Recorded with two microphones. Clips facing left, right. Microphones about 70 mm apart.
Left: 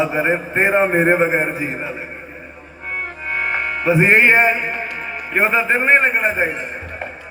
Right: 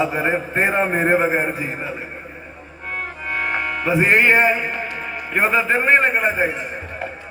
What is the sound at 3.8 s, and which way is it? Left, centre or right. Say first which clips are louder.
A man's voice: left 3 dB; left.